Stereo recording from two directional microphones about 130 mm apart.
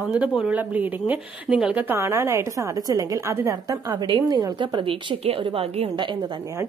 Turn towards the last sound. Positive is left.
turn(degrees=-40)  # may be behind; listen again after turning